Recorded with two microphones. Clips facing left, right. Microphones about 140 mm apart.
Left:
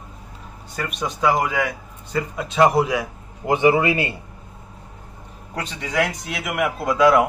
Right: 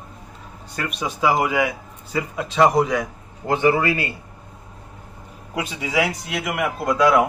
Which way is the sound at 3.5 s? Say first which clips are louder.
Left 2 dB; 15° left (ahead or behind).